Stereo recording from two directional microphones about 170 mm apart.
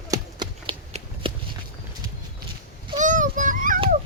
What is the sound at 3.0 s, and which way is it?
Children playing, 50° right (ahead or behind).